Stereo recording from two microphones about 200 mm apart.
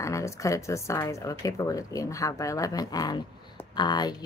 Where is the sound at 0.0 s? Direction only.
15° left (ahead or behind).